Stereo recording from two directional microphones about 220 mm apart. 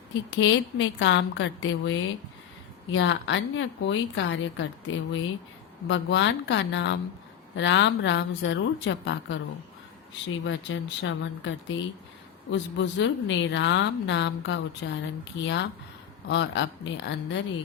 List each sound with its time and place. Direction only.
0.1 s a woman's voice: 60° left (ahead or behind)